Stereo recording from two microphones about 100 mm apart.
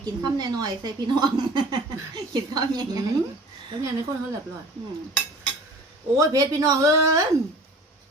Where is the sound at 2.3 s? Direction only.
45° right (ahead or behind).